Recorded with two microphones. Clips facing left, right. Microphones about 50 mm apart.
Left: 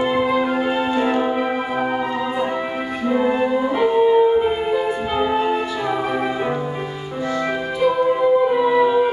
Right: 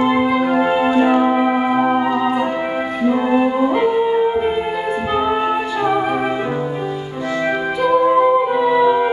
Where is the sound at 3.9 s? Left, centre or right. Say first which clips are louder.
Left 2 dB; centre.